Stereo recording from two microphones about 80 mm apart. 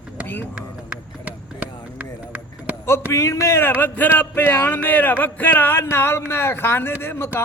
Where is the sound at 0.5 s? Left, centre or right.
Centre.